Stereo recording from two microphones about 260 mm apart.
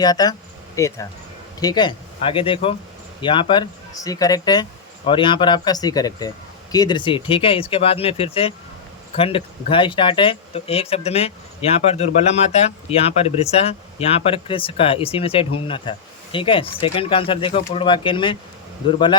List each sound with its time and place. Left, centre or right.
0.0 s speech: centre